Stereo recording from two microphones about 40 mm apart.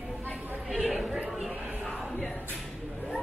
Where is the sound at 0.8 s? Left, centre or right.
Centre.